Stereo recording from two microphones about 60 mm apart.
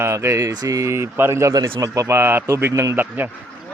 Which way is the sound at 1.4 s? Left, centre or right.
Right.